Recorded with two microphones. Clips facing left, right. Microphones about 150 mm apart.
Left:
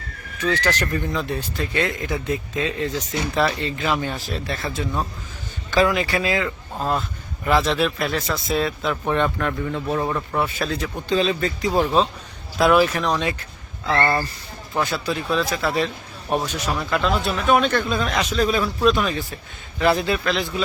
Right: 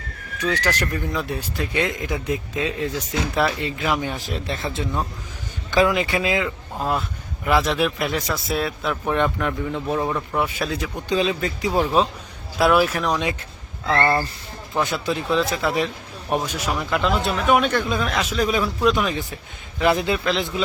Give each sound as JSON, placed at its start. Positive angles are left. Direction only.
{"t": 0.3, "sound": "speech", "side_deg": -10}
{"t": 5.7, "sound": "speech", "side_deg": -20}
{"t": 10.0, "sound": "speech", "side_deg": -5}
{"t": 14.8, "sound": "speech", "side_deg": -20}
{"t": 18.3, "sound": "speech", "side_deg": -15}